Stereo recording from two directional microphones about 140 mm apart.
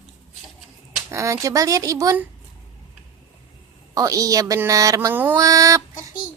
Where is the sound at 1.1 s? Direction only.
20° right (ahead or behind).